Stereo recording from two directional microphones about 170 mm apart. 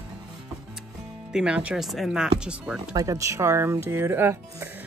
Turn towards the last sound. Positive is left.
turn(degrees=-15)  # may be behind; listen again after turning